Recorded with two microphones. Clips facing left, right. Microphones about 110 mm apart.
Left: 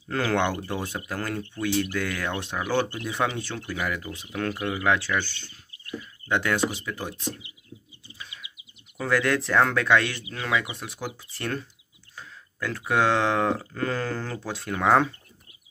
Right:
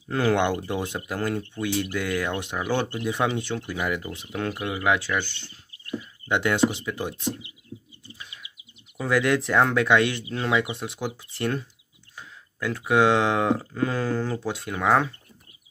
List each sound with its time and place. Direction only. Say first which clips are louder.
0.1 s speech: right 3 dB; 15° right (ahead or behind)
8.9 s speech: right 2 dB; 15° right (ahead or behind)
14.8 s speech: left 1 dB; 5° right (ahead or behind)